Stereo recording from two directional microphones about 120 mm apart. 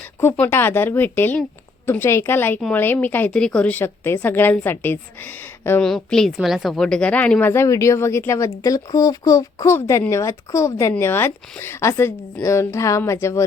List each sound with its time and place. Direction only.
0.2 s a woman's voice: 20° left (ahead or behind)
5.8 s a woman's voice: 5° left (ahead or behind)
7.5 s speech: 25° left (ahead or behind)